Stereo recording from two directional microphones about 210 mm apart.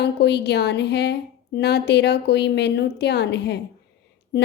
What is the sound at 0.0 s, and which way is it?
A woman's voice, 55° left (ahead or behind).